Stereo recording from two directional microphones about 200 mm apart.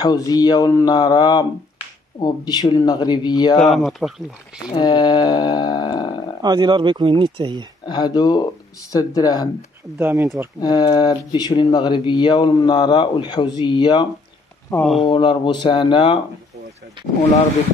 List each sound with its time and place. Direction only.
0.0 s speech: 20° left (ahead or behind)
3.5 s speech: centre (ahead or behind)
4.7 s speech: 20° left (ahead or behind)
6.4 s speech: 20° right (ahead or behind)
7.8 s speech: 20° left (ahead or behind)
9.9 s speech: 15° right (ahead or behind)
10.6 s speech: 20° left (ahead or behind)
14.7 s speech: 5° left (ahead or behind)
15.0 s speech: 25° left (ahead or behind)